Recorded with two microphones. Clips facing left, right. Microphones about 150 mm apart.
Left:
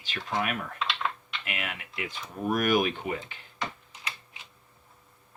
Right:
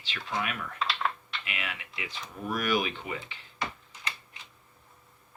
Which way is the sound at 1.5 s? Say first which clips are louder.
Left 3 dB; 50° left (ahead or behind).